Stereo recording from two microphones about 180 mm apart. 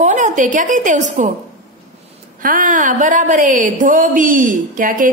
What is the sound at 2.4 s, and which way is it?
A woman's voice, 50° right (ahead or behind).